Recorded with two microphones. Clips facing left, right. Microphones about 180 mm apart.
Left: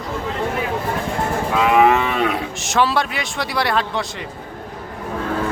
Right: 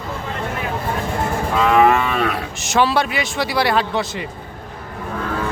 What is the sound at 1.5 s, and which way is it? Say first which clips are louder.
Moo: even; 10° left (ahead or behind).